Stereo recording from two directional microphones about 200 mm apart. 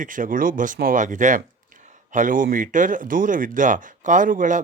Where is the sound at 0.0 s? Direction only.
40° right (ahead or behind).